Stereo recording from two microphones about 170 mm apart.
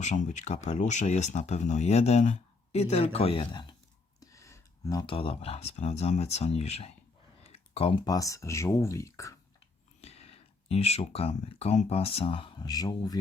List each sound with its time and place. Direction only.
0.0 s speech: 45° left (ahead or behind)
7.4 s a sound: 35° left (ahead or behind)
8.0 s speech: 20° left (ahead or behind)
10.0 s speech: 35° left (ahead or behind)